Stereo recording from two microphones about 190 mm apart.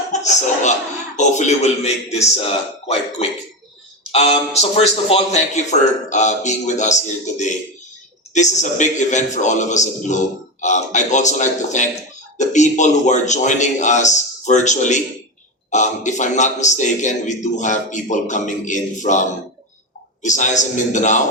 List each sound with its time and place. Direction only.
0.1 s a man's voice: 40° left (ahead or behind)
20.2 s a man's voice: 40° left (ahead or behind)